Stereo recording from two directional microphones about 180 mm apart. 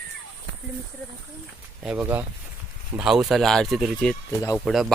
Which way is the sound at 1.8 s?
5° right (ahead or behind).